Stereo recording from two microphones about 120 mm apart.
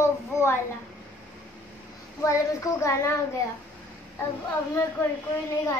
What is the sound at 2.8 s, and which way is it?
Speech, 25° left (ahead or behind).